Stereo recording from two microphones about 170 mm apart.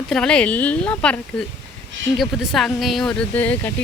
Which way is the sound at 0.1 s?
5° left (ahead or behind).